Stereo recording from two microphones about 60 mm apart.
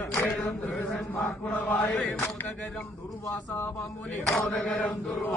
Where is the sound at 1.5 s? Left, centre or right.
Left.